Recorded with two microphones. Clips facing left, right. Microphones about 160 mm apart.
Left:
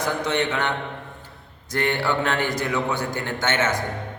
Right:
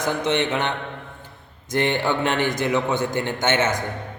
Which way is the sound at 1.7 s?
20° right (ahead or behind).